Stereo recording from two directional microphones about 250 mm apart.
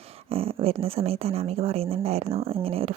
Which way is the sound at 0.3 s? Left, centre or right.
Right.